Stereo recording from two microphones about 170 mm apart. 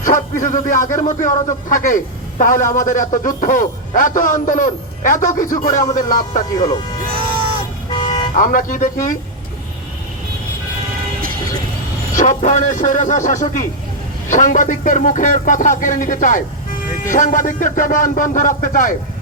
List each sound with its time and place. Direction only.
0.0 s a man's voice: 50° left (ahead or behind)
8.1 s speech: 50° left (ahead or behind)
12.1 s a man's voice: 50° left (ahead or behind)